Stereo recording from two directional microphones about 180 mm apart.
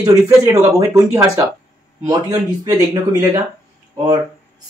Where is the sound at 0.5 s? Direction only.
20° right (ahead or behind).